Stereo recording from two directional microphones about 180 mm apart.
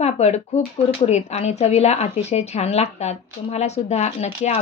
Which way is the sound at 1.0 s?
40° left (ahead or behind).